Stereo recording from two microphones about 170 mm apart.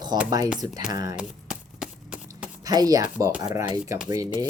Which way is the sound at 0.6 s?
20° right (ahead or behind).